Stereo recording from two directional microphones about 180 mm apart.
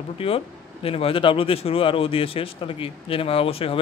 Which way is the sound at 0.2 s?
30° left (ahead or behind).